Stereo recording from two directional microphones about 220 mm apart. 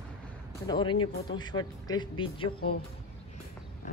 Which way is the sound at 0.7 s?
20° left (ahead or behind).